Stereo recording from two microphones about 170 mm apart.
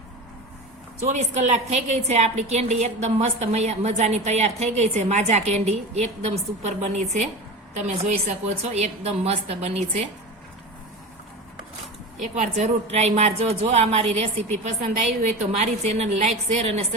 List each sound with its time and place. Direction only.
1.0 s a woman's voice: 40° right (ahead or behind)
12.2 s a woman's voice: 45° right (ahead or behind)